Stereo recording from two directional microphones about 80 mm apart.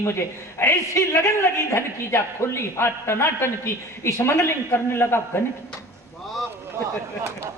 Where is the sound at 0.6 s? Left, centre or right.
Left.